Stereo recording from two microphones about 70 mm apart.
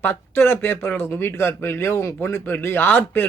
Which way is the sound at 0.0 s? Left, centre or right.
Left.